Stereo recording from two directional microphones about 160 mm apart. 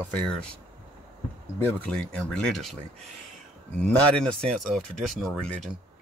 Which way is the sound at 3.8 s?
5° left (ahead or behind).